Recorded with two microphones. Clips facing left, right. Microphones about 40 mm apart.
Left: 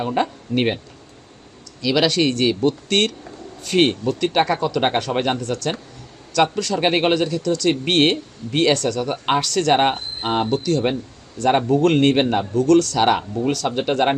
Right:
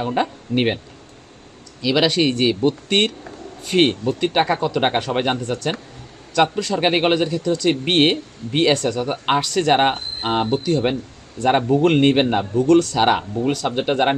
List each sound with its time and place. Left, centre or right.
0.0 s speech: centre
1.8 s speech: centre
3.8 s speech: centre
6.7 s speech: centre
11.4 s speech: centre
12.5 s speech: right